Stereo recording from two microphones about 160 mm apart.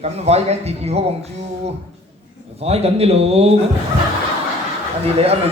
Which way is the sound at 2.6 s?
40° right (ahead or behind).